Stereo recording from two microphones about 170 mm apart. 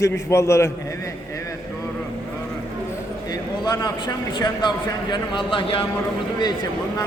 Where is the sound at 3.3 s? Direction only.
25° left (ahead or behind).